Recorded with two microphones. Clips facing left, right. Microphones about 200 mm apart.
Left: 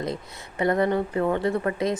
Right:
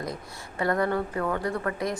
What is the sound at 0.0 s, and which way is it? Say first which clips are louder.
A woman's voice: left 4 dB; 20° left (ahead or behind).